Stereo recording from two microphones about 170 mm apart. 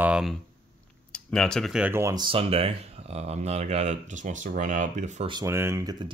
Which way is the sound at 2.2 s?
35° right (ahead or behind).